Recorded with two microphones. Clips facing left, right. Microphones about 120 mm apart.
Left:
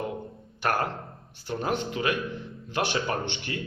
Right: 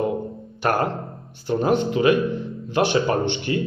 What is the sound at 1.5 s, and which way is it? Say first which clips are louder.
Speech: right 9 dB; 20° right (ahead or behind).